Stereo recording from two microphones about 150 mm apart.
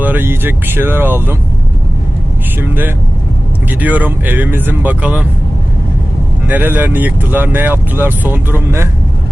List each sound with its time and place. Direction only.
0.0 s speech: 15° right (ahead or behind)
2.6 s speech: 15° right (ahead or behind)
6.5 s speech: 10° right (ahead or behind)